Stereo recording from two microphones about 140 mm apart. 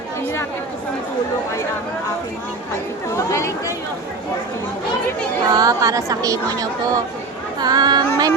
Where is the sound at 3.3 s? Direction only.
20° left (ahead or behind).